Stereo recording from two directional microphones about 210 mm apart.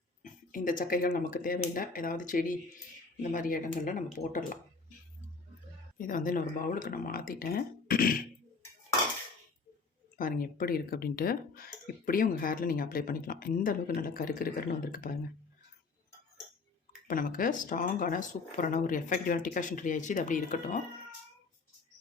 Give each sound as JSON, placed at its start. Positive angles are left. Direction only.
{"t": 0.2, "sound": "speech", "side_deg": 40}
{"t": 6.0, "sound": "speech", "side_deg": 40}
{"t": 10.2, "sound": "speech", "side_deg": 40}
{"t": 17.1, "sound": "speech", "side_deg": 40}